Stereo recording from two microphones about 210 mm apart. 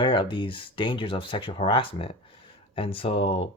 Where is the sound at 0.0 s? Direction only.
25° left (ahead or behind).